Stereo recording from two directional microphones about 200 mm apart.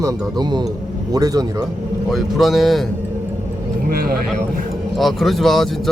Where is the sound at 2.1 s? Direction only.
Centre (ahead or behind).